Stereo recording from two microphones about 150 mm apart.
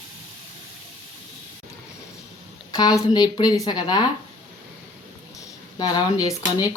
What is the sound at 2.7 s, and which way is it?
Speech, 25° left (ahead or behind).